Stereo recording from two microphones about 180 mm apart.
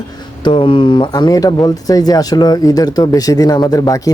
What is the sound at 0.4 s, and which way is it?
Speech, 30° left (ahead or behind).